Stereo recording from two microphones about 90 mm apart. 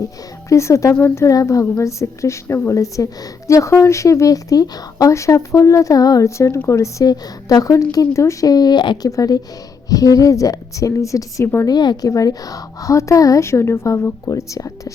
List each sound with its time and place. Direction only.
0.4 s a woman's voice: 35° left (ahead or behind); by 9.0 s 55° left (ahead or behind)
9.0 s a woman's voice: 40° left (ahead or behind)
11.7 s a woman's voice: 50° left (ahead or behind)
12.0 s a woman's voice: 40° left (ahead or behind)